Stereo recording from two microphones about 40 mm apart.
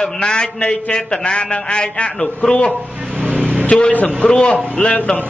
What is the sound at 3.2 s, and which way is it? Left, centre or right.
Vehicle, right.